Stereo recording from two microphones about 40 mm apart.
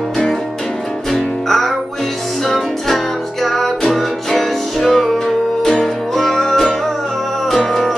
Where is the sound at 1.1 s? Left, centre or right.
Centre.